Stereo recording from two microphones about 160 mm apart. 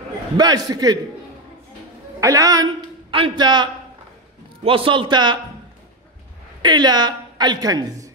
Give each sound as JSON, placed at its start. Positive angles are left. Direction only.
{"t": 0.4, "sound": "a woman's voice", "side_deg": -25}
{"t": 2.1, "sound": "a man's voice", "side_deg": -20}
{"t": 6.6, "sound": "a woman's voice", "side_deg": -25}